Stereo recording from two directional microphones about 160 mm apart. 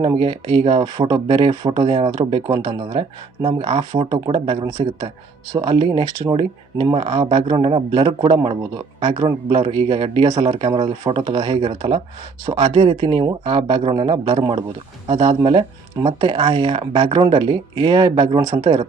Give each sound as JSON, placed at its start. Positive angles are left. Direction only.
{"t": 0.2, "sound": "speech", "side_deg": -35}